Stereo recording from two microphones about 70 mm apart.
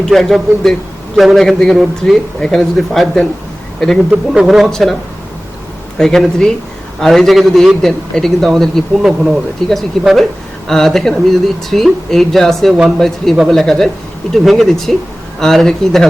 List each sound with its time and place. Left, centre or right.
0.0 s speech: centre
4.4 s speech: centre
6.0 s speech: centre